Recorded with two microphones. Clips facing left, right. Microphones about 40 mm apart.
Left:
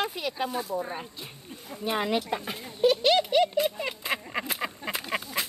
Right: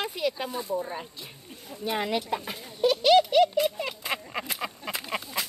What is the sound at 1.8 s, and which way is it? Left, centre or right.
Speech, centre.